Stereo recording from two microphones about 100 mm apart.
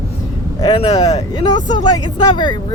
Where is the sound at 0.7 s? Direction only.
80° left.